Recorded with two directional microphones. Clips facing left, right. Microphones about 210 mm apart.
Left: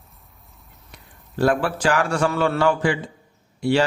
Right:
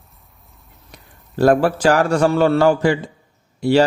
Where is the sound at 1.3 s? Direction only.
40° right (ahead or behind).